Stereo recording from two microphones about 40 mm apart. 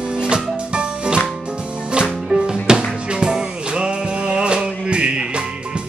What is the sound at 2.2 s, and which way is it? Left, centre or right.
Music, centre.